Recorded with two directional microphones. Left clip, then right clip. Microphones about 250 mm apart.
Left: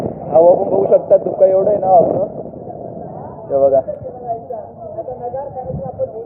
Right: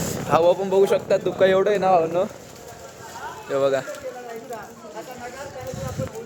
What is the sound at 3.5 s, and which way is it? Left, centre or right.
Speech, right.